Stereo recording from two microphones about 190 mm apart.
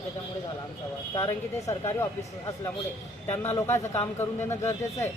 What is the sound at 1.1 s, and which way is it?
Speech, 20° left (ahead or behind).